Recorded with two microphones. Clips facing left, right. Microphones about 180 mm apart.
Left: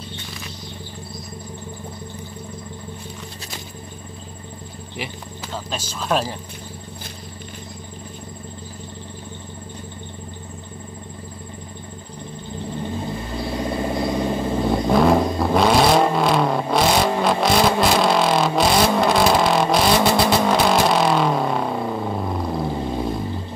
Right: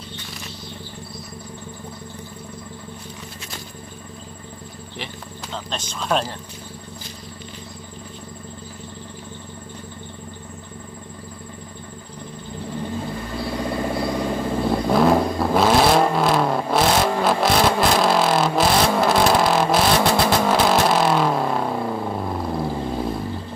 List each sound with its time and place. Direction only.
4.9 s speech: 10° left (ahead or behind)
13.5 s vehicle: 20° left (ahead or behind)
14.7 s vehicle: centre (ahead or behind)